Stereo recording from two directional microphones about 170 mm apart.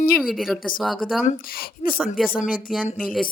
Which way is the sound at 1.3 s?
60° left (ahead or behind).